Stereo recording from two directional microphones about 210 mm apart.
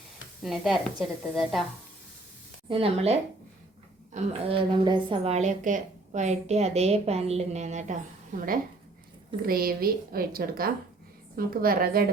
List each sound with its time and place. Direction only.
0.4 s speech: centre (ahead or behind)
2.6 s a woman's voice: 25° right (ahead or behind); by 12.0 s 45° right (ahead or behind)